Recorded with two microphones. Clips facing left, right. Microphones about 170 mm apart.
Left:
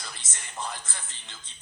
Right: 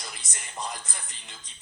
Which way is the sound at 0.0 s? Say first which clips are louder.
Right 1 dB; 15° right (ahead or behind).